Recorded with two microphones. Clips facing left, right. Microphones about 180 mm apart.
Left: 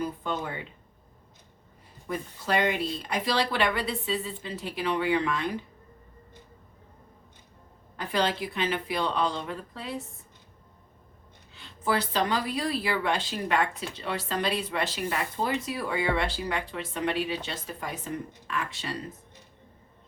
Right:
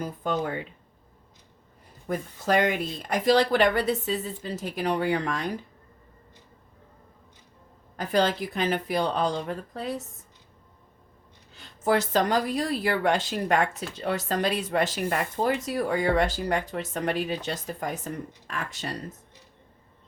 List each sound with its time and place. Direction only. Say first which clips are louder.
0.0 s a woman's voice: right 3 dB; 45° right (ahead or behind)
2.0 s a woman's voice: right 4 dB; 45° right (ahead or behind)
7.9 s a woman's voice: right 4 dB; 45° right (ahead or behind)
11.5 s a woman's voice: right 4 dB; 45° right (ahead or behind)